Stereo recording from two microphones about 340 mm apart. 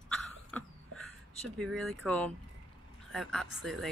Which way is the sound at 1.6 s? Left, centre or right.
Centre.